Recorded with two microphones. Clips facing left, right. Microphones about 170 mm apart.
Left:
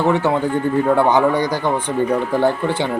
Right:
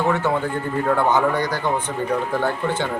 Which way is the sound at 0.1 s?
15° left (ahead or behind).